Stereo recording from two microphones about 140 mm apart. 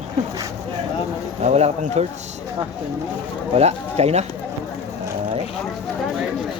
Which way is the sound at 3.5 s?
50° right (ahead or behind).